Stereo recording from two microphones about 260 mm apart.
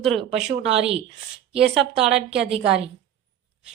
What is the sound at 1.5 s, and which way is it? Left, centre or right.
Speech, centre.